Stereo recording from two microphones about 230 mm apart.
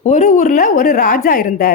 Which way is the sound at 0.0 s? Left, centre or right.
Left.